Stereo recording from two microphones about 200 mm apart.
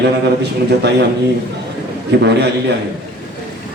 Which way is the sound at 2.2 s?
60° right (ahead or behind).